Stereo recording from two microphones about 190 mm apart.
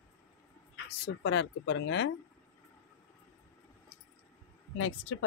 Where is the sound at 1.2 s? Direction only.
70° left (ahead or behind).